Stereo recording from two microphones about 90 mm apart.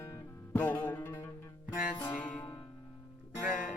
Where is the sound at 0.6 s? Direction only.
20° left (ahead or behind).